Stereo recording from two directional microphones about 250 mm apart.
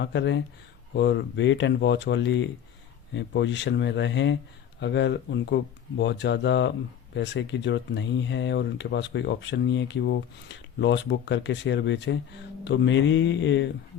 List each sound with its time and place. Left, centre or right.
0.0 s speech: left